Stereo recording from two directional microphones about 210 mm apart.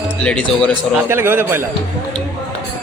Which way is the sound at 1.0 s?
10° right (ahead or behind).